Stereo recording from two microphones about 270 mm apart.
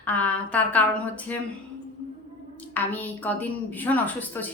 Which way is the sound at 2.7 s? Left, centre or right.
Centre.